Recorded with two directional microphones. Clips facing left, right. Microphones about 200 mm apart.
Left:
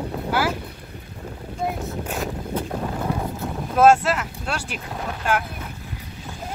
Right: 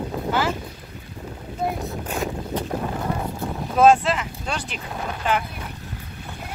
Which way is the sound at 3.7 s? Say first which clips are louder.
Even; 5° left (ahead or behind).